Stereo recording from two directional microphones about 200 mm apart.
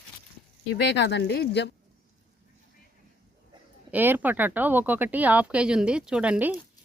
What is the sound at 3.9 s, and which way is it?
Speech, 10° right (ahead or behind).